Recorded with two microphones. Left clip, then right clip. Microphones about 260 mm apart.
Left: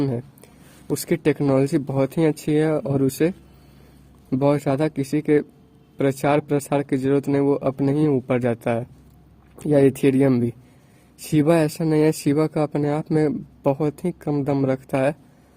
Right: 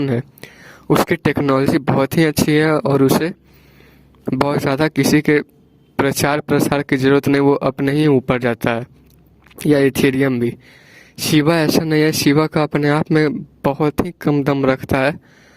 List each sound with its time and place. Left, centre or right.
0.1 s whispering: right
1.0 s speech: right
4.4 s speech: right